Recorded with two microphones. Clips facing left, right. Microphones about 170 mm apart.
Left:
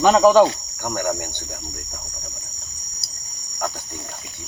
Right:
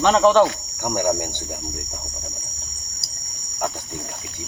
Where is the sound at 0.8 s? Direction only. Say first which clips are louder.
Right 3 dB; 15° right (ahead or behind).